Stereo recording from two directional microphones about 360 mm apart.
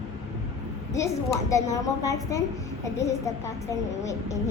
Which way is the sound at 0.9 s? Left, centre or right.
Centre.